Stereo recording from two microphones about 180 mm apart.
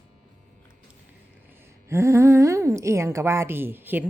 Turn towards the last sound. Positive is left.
turn(degrees=-10)  # may be behind; listen again after turning